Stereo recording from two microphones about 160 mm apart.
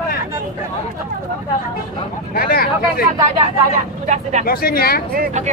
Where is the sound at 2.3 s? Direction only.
70° left (ahead or behind).